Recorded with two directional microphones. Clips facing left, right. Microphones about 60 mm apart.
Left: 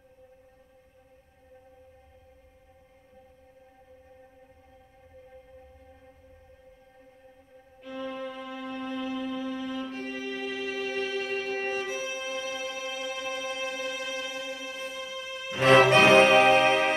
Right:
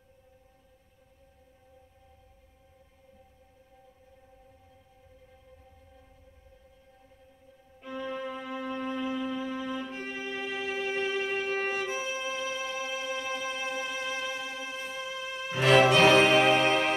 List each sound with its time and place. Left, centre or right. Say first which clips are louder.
7.8 s music: even; right
15.6 s music: left 2 dB; left